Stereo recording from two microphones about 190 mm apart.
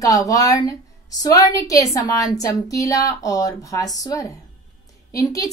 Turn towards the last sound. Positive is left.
turn(degrees=15)  # may be behind; listen again after turning